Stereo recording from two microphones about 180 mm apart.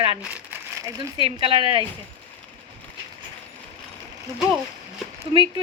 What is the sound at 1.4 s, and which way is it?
Speech, 30° right (ahead or behind).